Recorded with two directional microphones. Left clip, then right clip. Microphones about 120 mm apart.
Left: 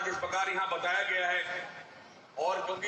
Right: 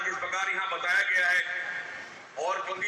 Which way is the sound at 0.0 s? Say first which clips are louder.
Right 2 dB; 30° left (ahead or behind).